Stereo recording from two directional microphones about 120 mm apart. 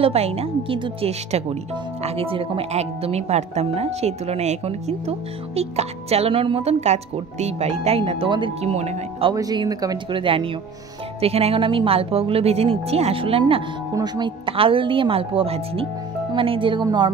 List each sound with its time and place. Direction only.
0.0 s speech: 60° right (ahead or behind)
8.7 s speech: 65° right (ahead or behind)
9.3 s speech: 30° right (ahead or behind)
10.1 s a woman's voice: 45° right (ahead or behind)
13.9 s a woman's voice: 35° right (ahead or behind)